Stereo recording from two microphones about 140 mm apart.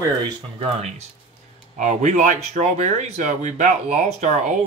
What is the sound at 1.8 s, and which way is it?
Speech, 60° right (ahead or behind).